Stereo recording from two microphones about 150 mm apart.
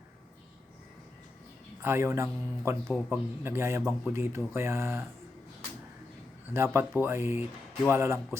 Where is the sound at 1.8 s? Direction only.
15° right (ahead or behind).